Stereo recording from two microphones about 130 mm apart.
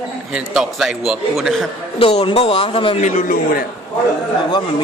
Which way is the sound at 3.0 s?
90° left.